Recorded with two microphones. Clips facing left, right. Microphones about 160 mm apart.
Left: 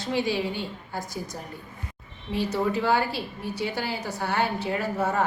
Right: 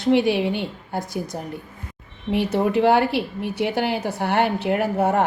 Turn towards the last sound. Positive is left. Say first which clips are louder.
# right 6 dB
turn(degrees=-65)  # may be behind; listen again after turning